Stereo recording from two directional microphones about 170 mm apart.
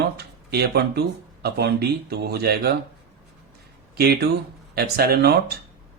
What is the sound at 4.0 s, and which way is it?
Speech, 65° right (ahead or behind).